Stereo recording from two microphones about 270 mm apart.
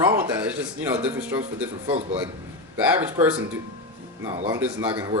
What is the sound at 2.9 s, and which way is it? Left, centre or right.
Speech, centre.